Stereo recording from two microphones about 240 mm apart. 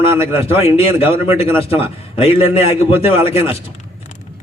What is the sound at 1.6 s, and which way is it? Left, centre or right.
Speech, left.